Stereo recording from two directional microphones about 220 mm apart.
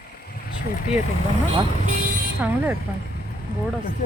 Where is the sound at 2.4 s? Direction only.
10° right (ahead or behind).